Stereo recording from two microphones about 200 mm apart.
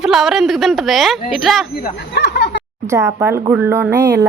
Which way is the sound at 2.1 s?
60° left (ahead or behind).